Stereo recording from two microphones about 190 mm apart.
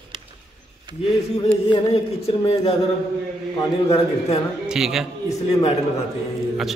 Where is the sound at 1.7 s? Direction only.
30° left (ahead or behind).